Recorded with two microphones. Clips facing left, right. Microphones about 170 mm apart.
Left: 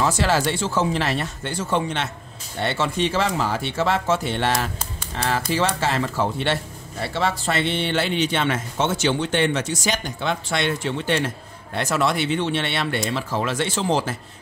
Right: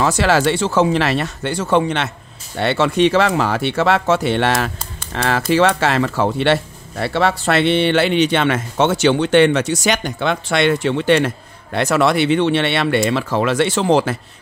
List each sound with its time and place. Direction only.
0.0 s speech: 75° right (ahead or behind)